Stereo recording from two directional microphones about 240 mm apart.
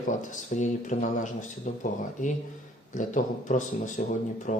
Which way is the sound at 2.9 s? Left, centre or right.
Left.